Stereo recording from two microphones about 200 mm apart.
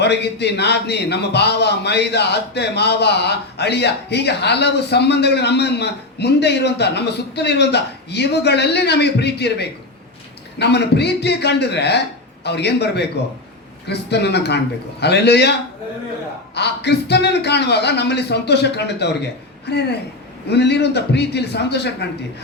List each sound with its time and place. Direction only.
0.0 s a man's voice: 55° left (ahead or behind)
16.6 s a man's voice: 55° left (ahead or behind)